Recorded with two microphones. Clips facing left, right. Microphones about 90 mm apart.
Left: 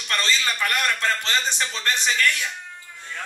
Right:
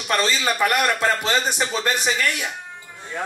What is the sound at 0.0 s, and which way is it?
A man's voice, 15° right (ahead or behind).